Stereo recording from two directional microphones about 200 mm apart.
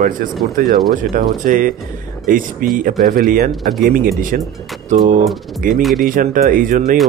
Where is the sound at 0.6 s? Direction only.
40° right (ahead or behind).